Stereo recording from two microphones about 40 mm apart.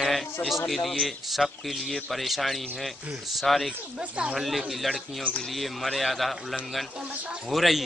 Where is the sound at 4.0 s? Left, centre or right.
Right.